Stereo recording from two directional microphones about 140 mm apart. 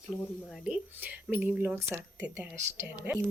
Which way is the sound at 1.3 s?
10° right (ahead or behind).